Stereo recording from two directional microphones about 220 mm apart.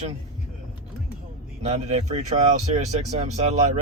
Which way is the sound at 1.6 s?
30° right (ahead or behind).